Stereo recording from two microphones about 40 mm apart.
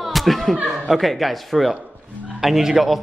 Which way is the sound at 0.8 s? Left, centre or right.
Centre.